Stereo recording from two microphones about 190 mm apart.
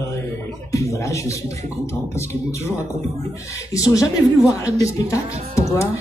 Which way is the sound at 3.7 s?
15° left (ahead or behind).